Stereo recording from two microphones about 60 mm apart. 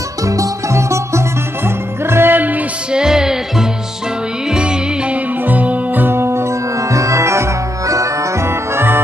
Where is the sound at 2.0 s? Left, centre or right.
Right.